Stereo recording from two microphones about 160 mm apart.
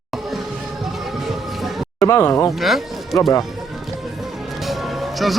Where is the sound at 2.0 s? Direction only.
15° left (ahead or behind).